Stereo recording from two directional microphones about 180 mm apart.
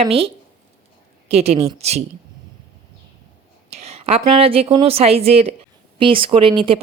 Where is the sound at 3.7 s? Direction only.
35° right (ahead or behind).